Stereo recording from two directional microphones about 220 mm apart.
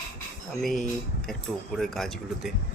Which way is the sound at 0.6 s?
Centre (ahead or behind).